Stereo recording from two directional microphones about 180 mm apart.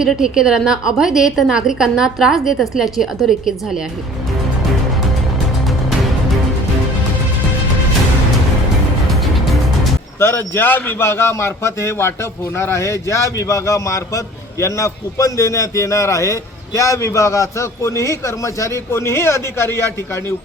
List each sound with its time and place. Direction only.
0.0 s a woman's voice: 5° right (ahead or behind)
9.2 s music: centre (ahead or behind)
10.2 s a man's voice: 10° left (ahead or behind)